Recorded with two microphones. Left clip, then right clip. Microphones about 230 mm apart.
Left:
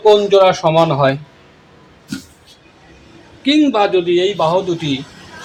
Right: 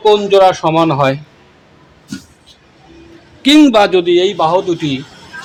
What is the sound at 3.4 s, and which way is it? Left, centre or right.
A man's voice, right.